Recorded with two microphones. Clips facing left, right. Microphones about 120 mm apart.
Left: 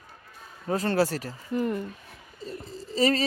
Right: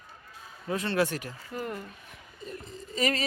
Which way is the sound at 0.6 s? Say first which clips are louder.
Left 3 dB; 40° left (ahead or behind).